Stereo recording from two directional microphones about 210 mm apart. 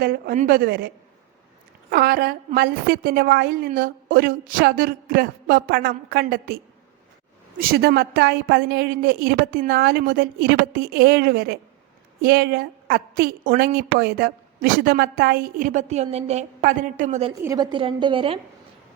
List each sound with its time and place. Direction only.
0.0 s a woman's voice: 45° right (ahead or behind)
1.9 s a woman's voice: 50° right (ahead or behind)
7.6 s a woman's voice: 50° right (ahead or behind); by 17.3 s 30° right (ahead or behind)
17.4 s a woman's voice: 15° right (ahead or behind)